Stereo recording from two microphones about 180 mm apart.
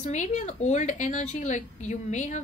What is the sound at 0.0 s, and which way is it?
A woman's voice, 40° left (ahead or behind).